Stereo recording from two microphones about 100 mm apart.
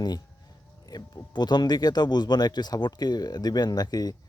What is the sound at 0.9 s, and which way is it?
Speech, 40° left (ahead or behind).